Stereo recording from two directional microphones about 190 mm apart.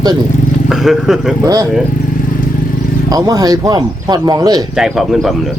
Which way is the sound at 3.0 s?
20° right (ahead or behind).